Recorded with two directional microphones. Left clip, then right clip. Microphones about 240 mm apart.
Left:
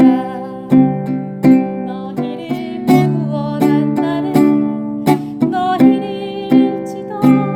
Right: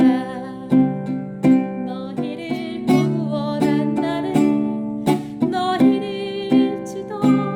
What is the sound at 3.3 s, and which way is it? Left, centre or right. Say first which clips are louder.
Music: left 3 dB; centre.